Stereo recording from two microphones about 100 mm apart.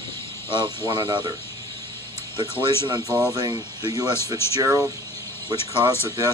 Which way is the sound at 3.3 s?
45° right (ahead or behind).